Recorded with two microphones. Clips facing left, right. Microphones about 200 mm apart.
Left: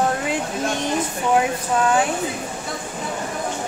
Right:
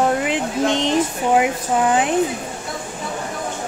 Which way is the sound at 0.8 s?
20° right (ahead or behind).